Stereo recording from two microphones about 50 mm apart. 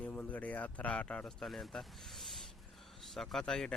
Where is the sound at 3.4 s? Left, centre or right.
Centre.